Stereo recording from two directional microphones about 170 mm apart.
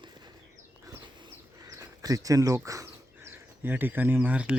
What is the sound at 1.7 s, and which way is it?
Speech, 20° right (ahead or behind).